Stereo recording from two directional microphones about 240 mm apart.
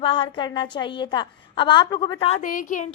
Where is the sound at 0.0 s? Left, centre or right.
Left.